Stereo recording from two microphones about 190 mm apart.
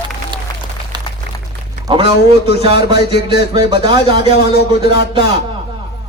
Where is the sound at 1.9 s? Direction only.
30° right (ahead or behind).